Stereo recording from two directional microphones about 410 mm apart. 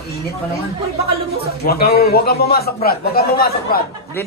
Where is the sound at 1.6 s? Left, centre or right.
Left.